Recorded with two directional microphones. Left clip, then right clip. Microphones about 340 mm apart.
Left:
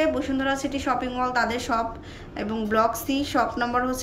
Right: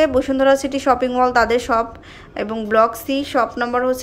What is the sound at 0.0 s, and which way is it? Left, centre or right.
A woman's voice, centre.